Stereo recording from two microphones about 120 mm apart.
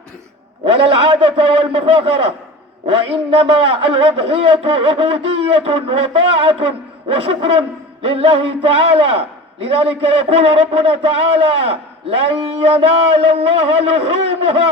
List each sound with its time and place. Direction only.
0.6 s a man's voice: 50° right (ahead or behind)